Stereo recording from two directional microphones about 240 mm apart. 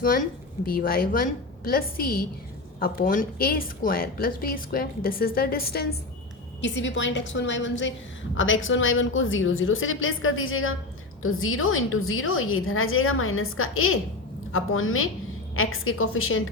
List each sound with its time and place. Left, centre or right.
0.6 s a woman's voice: left